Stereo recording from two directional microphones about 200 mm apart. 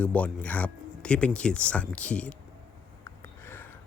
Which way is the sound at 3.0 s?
10° left (ahead or behind).